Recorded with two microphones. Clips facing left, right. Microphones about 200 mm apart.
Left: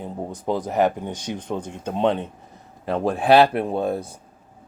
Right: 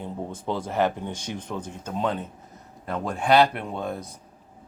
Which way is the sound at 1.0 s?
20° left (ahead or behind).